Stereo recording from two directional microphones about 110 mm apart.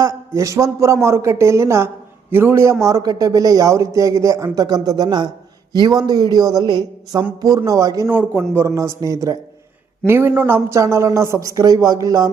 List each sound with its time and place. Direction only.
0.3 s a man's voice: 30° right (ahead or behind)
8.1 s a man's voice: 15° right (ahead or behind)
10.1 s a man's voice: 20° right (ahead or behind)